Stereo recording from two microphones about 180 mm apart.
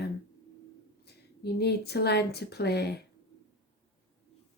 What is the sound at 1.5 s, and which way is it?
Speech, 65° left (ahead or behind).